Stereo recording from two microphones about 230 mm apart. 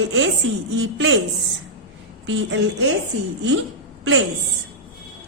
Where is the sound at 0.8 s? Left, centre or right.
Right.